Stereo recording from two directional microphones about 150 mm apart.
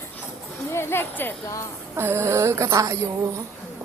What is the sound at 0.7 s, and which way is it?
Speech, 15° left (ahead or behind).